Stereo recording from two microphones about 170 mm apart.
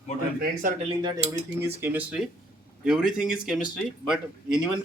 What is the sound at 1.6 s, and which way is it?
Speech, 15° right (ahead or behind).